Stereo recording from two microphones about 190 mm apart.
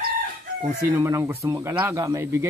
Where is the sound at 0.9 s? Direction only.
15° right (ahead or behind).